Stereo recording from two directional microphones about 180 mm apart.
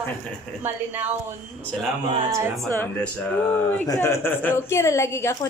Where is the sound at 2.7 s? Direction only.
10° left (ahead or behind).